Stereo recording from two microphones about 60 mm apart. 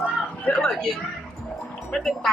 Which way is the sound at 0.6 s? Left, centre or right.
Centre.